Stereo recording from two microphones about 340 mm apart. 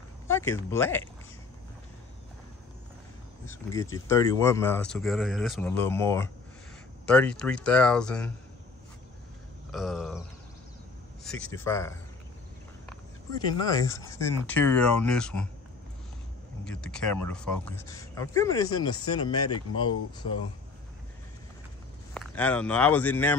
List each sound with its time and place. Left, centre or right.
0.3 s speech: centre
3.4 s speech: centre
9.7 s speech: centre
11.2 s speech: centre
13.8 s speech: centre
16.6 s speech: centre
17.0 s speech: left
17.6 s speech: centre
19.5 s speech: left
22.1 s speech: centre